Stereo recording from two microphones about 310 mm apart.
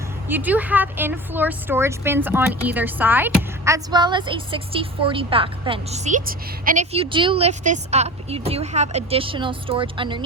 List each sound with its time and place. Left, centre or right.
0.3 s a woman's voice: centre